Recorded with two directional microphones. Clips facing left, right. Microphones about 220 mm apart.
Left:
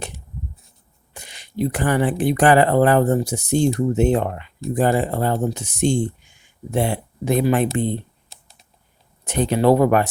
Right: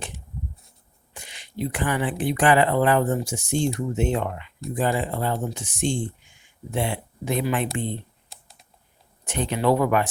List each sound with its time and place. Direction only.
1.1 s speech: 40° left (ahead or behind)
9.2 s speech: 40° left (ahead or behind)